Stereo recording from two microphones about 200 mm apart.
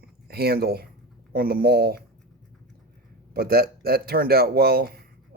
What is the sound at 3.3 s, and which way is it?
Speech, 50° right (ahead or behind).